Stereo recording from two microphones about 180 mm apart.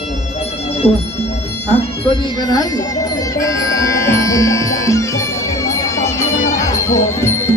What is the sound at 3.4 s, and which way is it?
Music, 15° left (ahead or behind).